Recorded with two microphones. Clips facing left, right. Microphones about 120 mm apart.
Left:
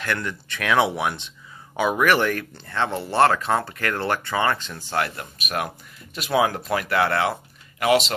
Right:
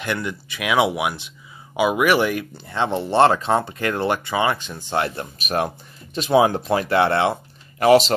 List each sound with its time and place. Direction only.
0.0 s speech: 15° right (ahead or behind); by 8.1 s 35° right (ahead or behind)